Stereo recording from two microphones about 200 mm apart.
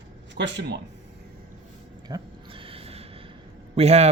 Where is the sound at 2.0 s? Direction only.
25° right (ahead or behind).